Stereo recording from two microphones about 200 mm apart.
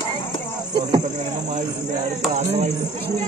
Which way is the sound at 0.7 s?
25° right (ahead or behind).